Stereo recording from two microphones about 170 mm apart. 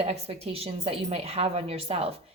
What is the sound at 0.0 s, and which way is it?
A woman's voice, 35° right (ahead or behind).